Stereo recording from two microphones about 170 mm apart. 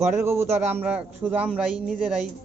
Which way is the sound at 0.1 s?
15° right (ahead or behind).